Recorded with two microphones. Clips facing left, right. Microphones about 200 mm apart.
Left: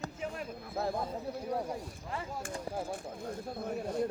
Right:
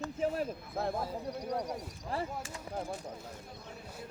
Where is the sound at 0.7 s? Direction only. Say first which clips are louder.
Left 5 dB; centre (ahead or behind).